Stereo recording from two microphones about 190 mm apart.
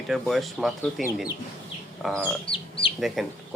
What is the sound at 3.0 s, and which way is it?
Speech, centre (ahead or behind).